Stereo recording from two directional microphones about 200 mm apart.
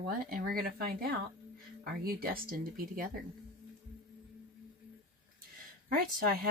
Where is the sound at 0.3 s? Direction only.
45° right (ahead or behind).